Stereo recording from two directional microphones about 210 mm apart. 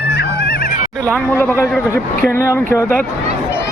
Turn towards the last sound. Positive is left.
turn(degrees=10)  # may be behind; listen again after turning